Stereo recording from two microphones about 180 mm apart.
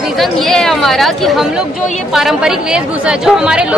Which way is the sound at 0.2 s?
Centre (ahead or behind).